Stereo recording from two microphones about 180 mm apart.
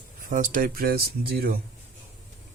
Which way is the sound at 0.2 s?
50° right (ahead or behind).